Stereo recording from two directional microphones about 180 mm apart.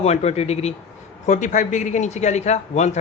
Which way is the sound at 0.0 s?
35° left (ahead or behind).